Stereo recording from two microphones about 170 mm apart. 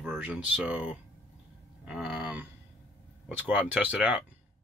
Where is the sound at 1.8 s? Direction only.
5° right (ahead or behind).